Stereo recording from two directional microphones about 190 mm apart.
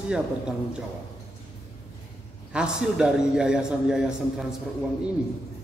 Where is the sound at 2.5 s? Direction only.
5° right (ahead or behind).